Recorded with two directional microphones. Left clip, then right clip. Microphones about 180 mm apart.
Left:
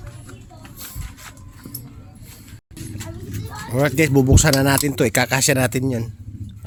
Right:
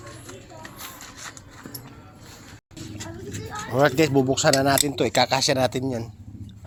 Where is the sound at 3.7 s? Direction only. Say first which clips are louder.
Left 1 dB; 15° left (ahead or behind).